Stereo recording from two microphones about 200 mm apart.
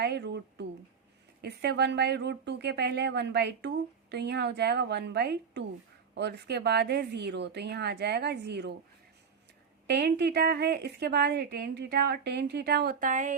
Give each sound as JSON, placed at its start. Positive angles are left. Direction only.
{"t": 0.0, "sound": "a woman's voice", "side_deg": -55}
{"t": 9.8, "sound": "a woman's voice", "side_deg": -55}